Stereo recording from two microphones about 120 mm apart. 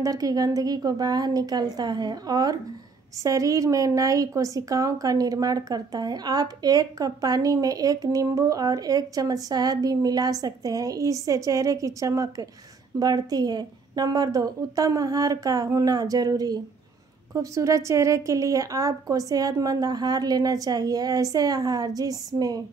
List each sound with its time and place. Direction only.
0.0 s a woman's voice: 30° right (ahead or behind)